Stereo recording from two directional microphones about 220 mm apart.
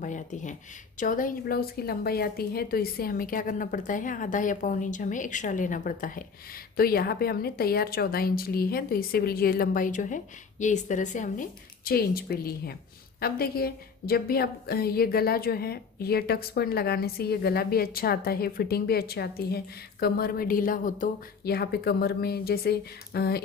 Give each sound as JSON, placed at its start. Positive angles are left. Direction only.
{"t": 0.0, "sound": "a woman's voice", "side_deg": 35}